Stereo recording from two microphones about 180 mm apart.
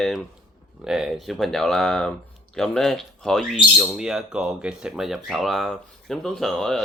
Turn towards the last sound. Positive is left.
turn(degrees=0)  # may be behind; listen again after turning